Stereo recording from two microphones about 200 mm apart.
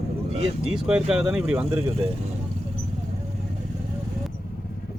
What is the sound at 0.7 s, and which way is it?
Speech, 5° right (ahead or behind).